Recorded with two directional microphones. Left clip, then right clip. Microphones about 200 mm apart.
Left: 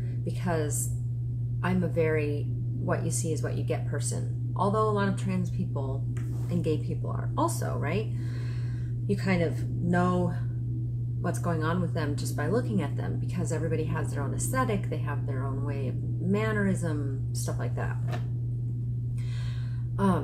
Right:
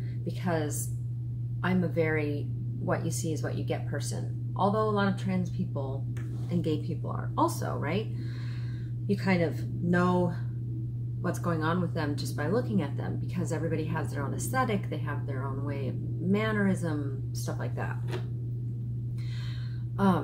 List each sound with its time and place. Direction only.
0.2 s speech: 5° right (ahead or behind)
9.0 s speech: 5° right (ahead or behind)